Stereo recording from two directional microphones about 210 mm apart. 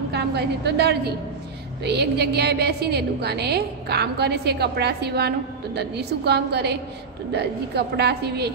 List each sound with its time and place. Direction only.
0.1 s a woman's voice: 50° right (ahead or behind)